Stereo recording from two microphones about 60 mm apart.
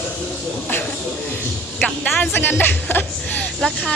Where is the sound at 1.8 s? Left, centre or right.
Left.